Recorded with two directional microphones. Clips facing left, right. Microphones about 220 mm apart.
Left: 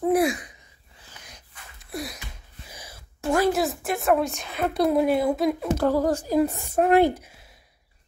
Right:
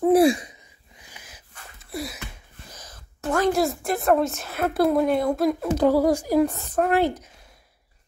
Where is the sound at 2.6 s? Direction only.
10° left (ahead or behind).